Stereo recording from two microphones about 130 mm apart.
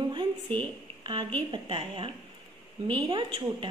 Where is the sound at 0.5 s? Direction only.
15° left (ahead or behind).